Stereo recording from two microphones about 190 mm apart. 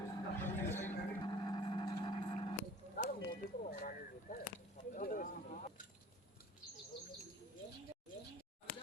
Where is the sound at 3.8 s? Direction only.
50° left (ahead or behind).